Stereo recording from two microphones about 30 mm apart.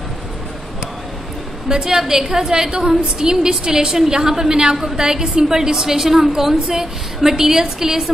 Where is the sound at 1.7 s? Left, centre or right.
Centre.